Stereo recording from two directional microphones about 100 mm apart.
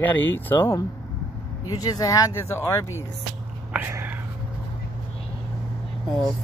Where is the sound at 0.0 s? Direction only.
20° left (ahead or behind).